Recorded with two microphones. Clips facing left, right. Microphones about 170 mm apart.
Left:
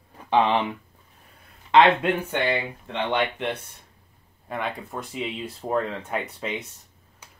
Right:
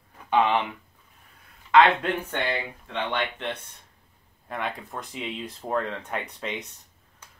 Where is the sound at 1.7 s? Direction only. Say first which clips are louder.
Left 2 dB; 25° left (ahead or behind).